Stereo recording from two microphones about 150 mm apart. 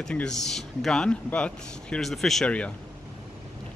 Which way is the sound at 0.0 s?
5° left (ahead or behind).